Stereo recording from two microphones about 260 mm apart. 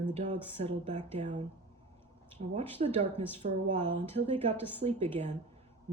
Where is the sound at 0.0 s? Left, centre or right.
Right.